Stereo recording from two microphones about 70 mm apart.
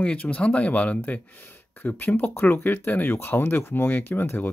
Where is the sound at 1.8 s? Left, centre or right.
Left.